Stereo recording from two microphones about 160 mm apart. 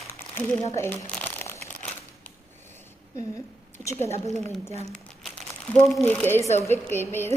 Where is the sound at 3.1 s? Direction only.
20° left (ahead or behind).